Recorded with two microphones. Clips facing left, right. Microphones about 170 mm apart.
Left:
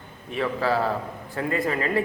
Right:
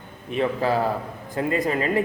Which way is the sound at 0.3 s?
20° right (ahead or behind).